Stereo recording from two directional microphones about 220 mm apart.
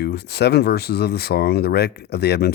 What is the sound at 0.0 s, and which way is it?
Speech, 50° left (ahead or behind).